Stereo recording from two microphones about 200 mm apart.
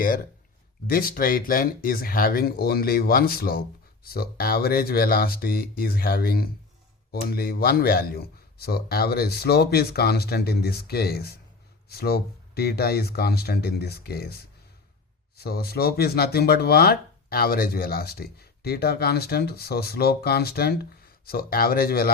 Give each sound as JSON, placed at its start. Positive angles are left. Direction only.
{"t": 0.9, "sound": "speech", "side_deg": 45}